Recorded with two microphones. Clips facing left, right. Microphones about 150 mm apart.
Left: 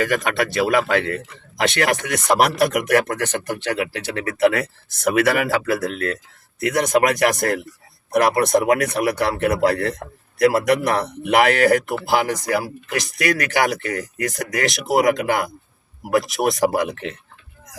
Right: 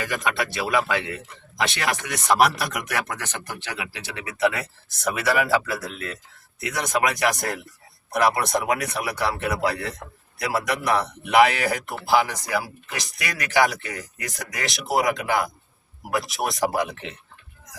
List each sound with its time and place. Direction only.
0.0 s speech: 60° left (ahead or behind)